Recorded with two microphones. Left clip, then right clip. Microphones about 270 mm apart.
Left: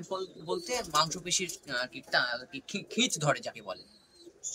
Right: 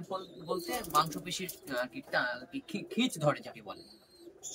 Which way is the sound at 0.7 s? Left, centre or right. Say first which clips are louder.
Left 1 dB; centre.